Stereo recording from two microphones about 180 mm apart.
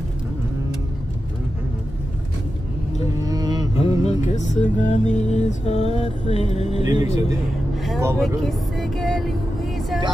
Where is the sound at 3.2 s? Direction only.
20° right (ahead or behind).